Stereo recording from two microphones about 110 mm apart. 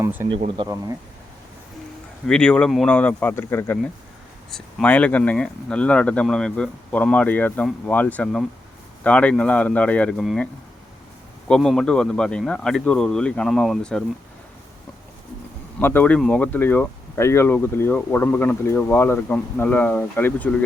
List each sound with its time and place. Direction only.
0.0 s speech: 20° right (ahead or behind)
0.3 s speech: 55° right (ahead or behind)
2.2 s speech: 5° left (ahead or behind); by 3.8 s 25° left (ahead or behind)
4.5 s speech: 10° left (ahead or behind)
15.8 s speech: 20° left (ahead or behind)